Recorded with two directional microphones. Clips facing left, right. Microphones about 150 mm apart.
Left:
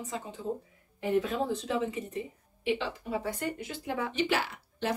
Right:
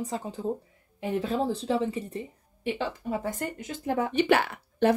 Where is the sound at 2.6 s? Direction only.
45° right (ahead or behind).